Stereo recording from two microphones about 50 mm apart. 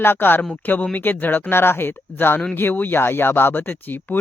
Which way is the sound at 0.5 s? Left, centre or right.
Left.